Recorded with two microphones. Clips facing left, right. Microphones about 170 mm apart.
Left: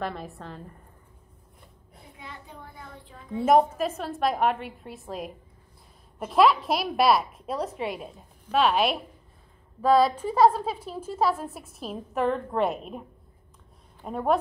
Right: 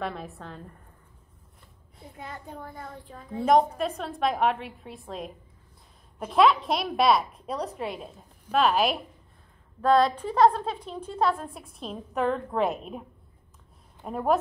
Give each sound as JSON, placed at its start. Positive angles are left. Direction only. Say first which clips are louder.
{"t": 0.0, "sound": "a woman's voice", "louder": "left 1 dB", "side_deg": 0}
{"t": 2.1, "sound": "a child's voice", "louder": "right 5 dB", "side_deg": -45}
{"t": 3.3, "sound": "a woman's voice", "louder": "left 1 dB", "side_deg": 5}
{"t": 14.0, "sound": "a woman's voice", "louder": "even", "side_deg": 0}